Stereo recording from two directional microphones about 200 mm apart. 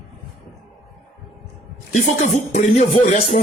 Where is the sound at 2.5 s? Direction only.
35° left (ahead or behind).